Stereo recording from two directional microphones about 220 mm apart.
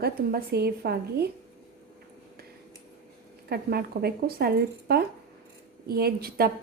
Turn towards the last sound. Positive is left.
turn(degrees=-45)  # may be behind; listen again after turning